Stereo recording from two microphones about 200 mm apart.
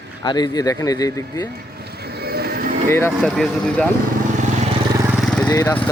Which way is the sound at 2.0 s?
50° right (ahead or behind).